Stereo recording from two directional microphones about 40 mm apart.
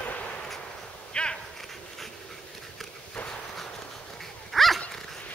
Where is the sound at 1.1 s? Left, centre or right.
Left.